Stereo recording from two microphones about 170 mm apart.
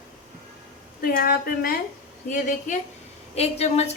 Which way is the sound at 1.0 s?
60° left (ahead or behind).